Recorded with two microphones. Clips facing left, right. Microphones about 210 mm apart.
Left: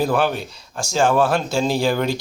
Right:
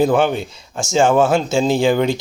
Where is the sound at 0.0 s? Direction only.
20° right (ahead or behind).